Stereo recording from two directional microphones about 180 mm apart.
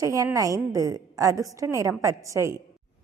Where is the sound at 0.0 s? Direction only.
15° right (ahead or behind).